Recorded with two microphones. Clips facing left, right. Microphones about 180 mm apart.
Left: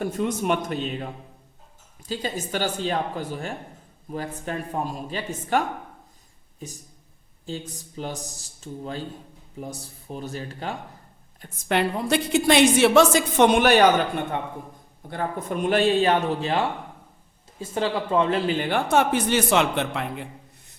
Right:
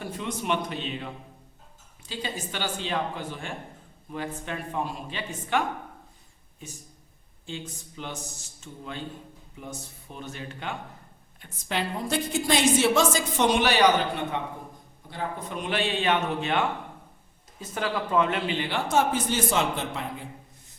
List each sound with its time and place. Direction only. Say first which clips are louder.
0.0 s a man's voice: left 7 dB; 45° left (ahead or behind)
7.4 s a man's voice: left 4 dB; 40° left (ahead or behind)
11.7 s a woman's voice: left 6 dB; 65° left (ahead or behind)